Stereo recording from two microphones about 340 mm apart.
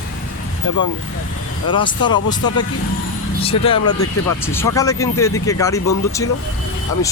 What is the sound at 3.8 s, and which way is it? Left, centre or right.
Speech, left.